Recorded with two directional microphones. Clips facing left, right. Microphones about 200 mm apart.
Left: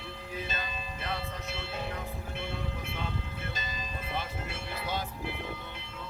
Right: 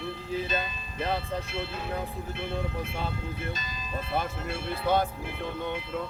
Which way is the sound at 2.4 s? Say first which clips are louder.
Right 7 dB; 55° right (ahead or behind).